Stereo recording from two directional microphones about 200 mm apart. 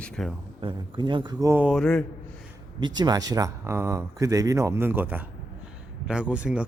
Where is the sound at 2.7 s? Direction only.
20° right (ahead or behind).